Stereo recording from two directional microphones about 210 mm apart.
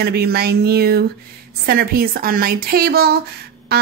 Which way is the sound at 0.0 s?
50° right (ahead or behind).